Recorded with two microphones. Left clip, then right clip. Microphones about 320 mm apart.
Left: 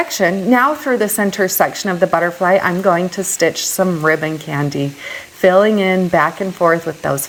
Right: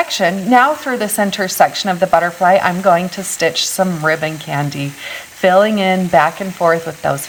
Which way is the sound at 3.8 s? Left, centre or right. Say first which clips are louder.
Left 4 dB; right.